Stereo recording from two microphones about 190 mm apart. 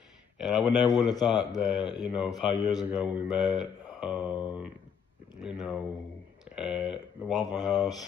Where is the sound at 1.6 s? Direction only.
5° right (ahead or behind).